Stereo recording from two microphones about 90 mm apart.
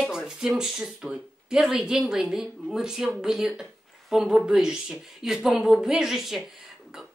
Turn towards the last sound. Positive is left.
turn(degrees=-5)  # may be behind; listen again after turning